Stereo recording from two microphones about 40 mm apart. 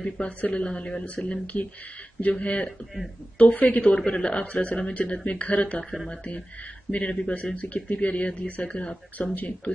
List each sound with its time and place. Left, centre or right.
0.2 s speech: left
1.0 s speech: left
3.9 s speech: left
9.2 s speech: left